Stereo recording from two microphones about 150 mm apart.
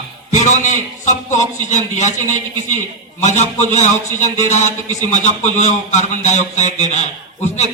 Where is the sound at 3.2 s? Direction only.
50° left (ahead or behind).